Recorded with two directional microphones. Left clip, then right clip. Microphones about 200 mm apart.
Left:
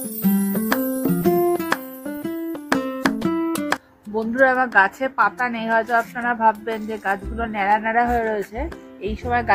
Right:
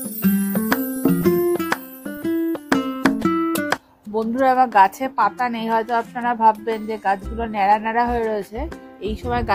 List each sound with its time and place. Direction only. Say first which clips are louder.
0.0 s music: even; centre (ahead or behind)
4.1 s a sound: even; 55° right (ahead or behind)
4.7 s a woman's voice: right 2 dB; 55° right (ahead or behind)